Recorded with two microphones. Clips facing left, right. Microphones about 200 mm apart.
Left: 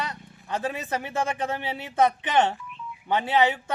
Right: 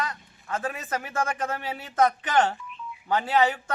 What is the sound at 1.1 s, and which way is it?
Speech, 20° left (ahead or behind).